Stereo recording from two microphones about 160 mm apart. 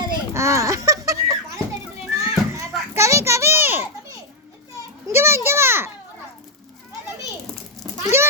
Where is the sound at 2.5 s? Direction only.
15° right (ahead or behind).